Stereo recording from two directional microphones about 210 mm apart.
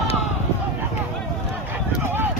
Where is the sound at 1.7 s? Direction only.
10° right (ahead or behind).